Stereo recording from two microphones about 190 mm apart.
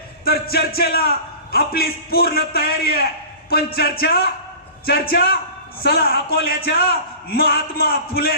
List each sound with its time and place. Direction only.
0.3 s a man's voice: 55° left (ahead or behind)